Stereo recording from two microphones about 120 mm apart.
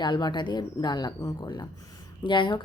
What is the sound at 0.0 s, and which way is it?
Speech, 40° left (ahead or behind).